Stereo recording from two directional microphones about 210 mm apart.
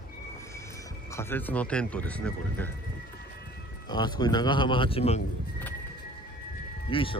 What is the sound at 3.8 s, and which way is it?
Speech, 20° left (ahead or behind).